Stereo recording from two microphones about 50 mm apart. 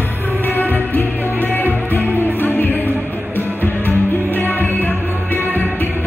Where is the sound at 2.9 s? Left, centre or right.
Right.